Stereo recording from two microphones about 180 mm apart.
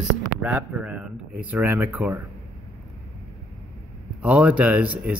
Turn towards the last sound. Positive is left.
turn(degrees=-10)  # may be behind; listen again after turning